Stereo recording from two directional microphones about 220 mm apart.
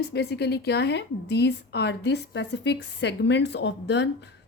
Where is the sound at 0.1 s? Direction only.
50° left (ahead or behind).